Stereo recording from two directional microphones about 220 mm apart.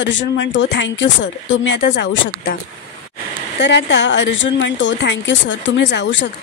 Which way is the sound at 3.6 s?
55° left (ahead or behind).